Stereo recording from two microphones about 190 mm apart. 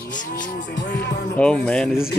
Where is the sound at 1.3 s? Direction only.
5° left (ahead or behind).